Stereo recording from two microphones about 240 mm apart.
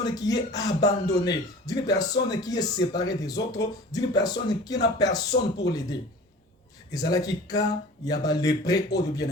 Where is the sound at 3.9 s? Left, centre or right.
Centre.